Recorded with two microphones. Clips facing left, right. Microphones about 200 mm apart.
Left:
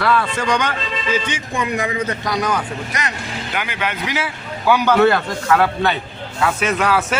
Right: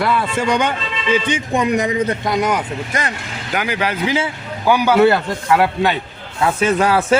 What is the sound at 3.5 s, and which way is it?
Speech, 40° right (ahead or behind).